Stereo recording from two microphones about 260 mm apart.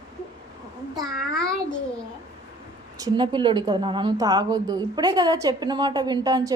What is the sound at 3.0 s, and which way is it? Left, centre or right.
A woman's voice, centre.